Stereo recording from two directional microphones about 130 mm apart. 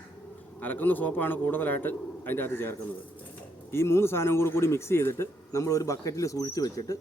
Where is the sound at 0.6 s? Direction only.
15° left (ahead or behind).